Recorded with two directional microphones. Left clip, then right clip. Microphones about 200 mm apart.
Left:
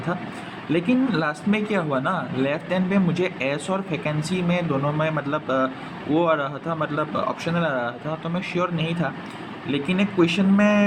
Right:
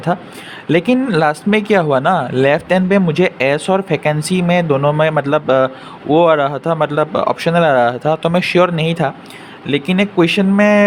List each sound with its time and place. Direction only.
0.7 s speech: 55° right (ahead or behind)